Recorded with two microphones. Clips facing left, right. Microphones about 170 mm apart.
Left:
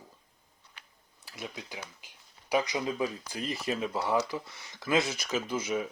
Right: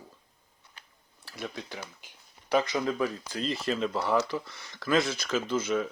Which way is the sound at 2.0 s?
5° left (ahead or behind).